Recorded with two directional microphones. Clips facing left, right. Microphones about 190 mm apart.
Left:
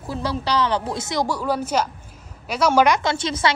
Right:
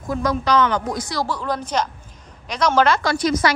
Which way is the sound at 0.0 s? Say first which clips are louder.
Right 4 dB; 30° left (ahead or behind).